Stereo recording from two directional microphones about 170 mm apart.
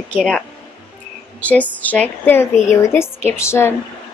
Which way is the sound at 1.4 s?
10° left (ahead or behind).